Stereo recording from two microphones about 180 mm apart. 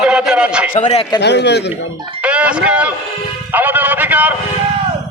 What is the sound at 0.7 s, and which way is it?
Speech, 40° left (ahead or behind).